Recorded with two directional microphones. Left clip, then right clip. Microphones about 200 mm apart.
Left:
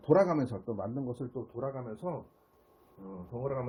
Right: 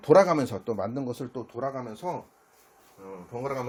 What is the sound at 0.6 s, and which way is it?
Speech, 55° right (ahead or behind).